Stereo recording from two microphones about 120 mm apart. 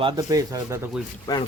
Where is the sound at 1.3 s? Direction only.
30° left (ahead or behind).